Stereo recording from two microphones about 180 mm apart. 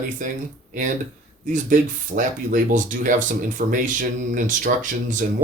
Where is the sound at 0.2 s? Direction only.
45° right (ahead or behind).